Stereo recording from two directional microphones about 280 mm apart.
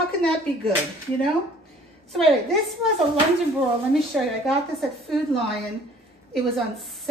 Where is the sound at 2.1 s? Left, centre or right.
Centre.